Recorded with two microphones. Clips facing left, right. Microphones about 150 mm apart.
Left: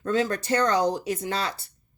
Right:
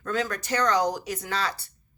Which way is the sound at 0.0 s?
30° left (ahead or behind).